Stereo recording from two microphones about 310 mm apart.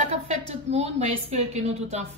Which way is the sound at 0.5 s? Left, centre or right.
Right.